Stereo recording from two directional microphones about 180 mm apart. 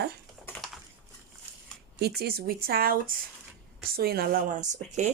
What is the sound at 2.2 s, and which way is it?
Speech, 60° right (ahead or behind).